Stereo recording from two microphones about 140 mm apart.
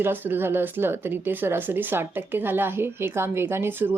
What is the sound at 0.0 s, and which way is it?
Speech, 15° right (ahead or behind).